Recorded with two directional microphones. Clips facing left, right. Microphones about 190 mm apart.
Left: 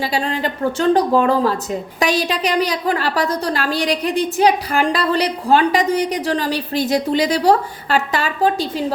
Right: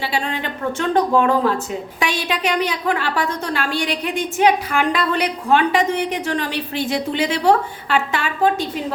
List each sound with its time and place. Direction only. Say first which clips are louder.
0.1 s a woman's voice: left 3 dB; 35° left (ahead or behind)